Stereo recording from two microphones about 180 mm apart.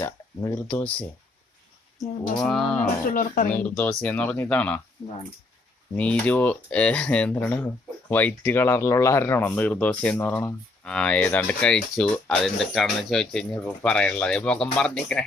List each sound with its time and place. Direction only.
0.0 s speech: 15° left (ahead or behind)
2.4 s speech: centre (ahead or behind)
3.1 s speech: 50° left (ahead or behind)
3.5 s speech: 5° left (ahead or behind)
6.0 s speech: 5° left (ahead or behind)